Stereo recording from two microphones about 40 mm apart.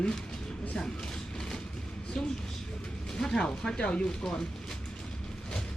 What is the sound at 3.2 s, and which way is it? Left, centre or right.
Speech, centre.